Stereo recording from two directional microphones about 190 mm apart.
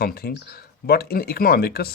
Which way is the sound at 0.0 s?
55° left (ahead or behind).